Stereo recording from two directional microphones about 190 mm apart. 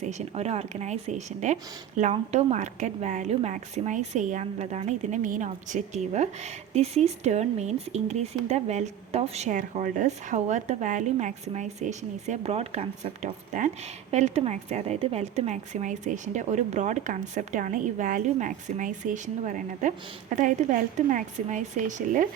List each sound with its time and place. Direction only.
0.0 s a woman's voice: 35° right (ahead or behind)